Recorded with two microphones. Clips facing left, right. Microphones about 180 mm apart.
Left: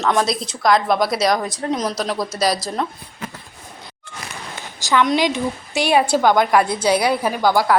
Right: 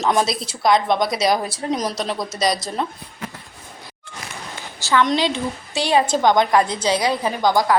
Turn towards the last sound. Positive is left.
turn(degrees=-15)  # may be behind; listen again after turning